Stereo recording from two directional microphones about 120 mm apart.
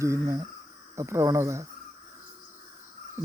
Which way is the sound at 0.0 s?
25° right (ahead or behind).